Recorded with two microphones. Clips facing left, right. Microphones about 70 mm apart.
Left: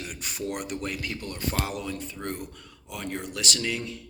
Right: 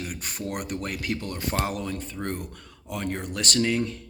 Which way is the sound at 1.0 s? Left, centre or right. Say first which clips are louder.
Right 4 dB; right.